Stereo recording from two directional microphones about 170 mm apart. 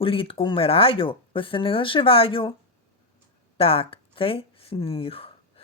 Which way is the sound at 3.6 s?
35° left (ahead or behind).